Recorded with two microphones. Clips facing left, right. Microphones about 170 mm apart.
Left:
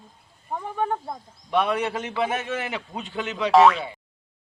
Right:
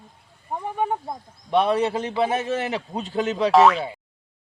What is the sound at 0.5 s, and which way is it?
Speech, 15° right (ahead or behind).